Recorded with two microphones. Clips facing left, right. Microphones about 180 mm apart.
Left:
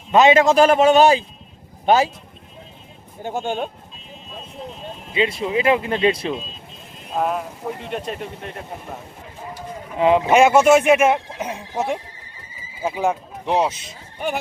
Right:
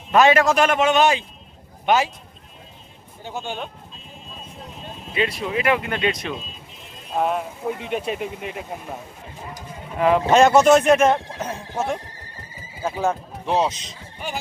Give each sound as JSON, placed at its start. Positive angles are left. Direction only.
{"t": 0.1, "sound": "a man's voice", "side_deg": 20}
{"t": 3.2, "sound": "speech", "side_deg": 50}
{"t": 5.1, "sound": "speech", "side_deg": 25}
{"t": 7.2, "sound": "speech", "side_deg": 0}
{"t": 9.6, "sound": "speech", "side_deg": 20}